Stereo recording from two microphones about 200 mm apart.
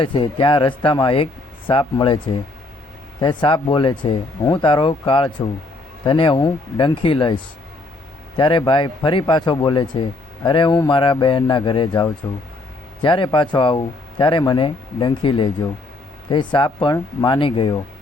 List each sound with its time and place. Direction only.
0.0 s speech: 25° left (ahead or behind)